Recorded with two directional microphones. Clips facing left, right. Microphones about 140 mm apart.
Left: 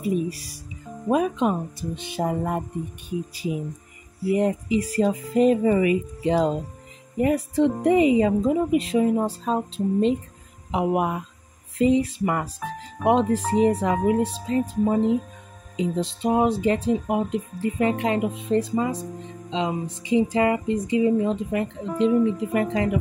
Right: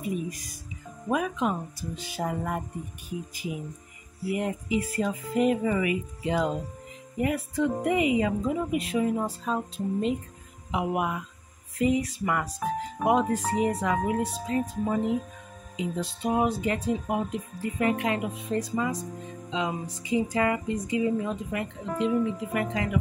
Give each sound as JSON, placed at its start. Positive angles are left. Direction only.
{"t": 0.3, "sound": "speech", "side_deg": 30}
{"t": 4.3, "sound": "speech", "side_deg": 35}